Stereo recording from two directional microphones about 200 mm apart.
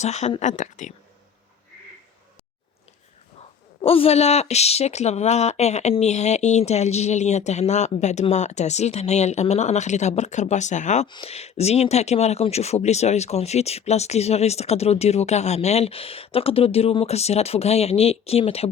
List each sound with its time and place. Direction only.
0.0 s speech: 35° left (ahead or behind)
3.8 s speech: 30° left (ahead or behind)